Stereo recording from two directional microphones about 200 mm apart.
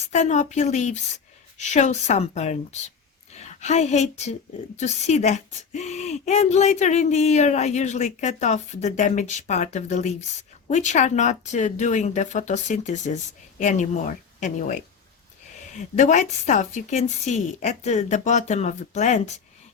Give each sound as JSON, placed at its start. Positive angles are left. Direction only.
{"t": 0.0, "sound": "a woman's voice", "side_deg": 35}
{"t": 16.0, "sound": "a woman's voice", "side_deg": 40}